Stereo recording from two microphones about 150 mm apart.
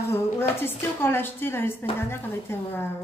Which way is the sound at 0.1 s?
15° left (ahead or behind).